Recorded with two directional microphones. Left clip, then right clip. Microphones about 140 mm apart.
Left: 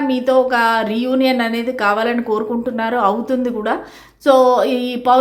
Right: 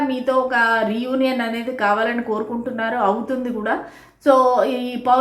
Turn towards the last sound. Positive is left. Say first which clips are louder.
# left 3 dB
turn(degrees=35)  # may be behind; listen again after turning